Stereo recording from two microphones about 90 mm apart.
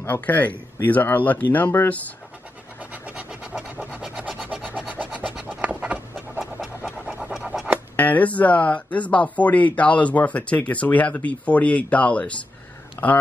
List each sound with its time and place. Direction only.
0.0 s speech: 20° left (ahead or behind)
2.9 s rub: 15° right (ahead or behind)
5.3 s pant: 10° right (ahead or behind)
7.9 s speech: 20° left (ahead or behind)